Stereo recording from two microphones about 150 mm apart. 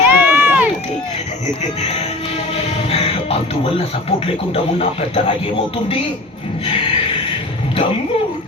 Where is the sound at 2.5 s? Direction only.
40° left (ahead or behind).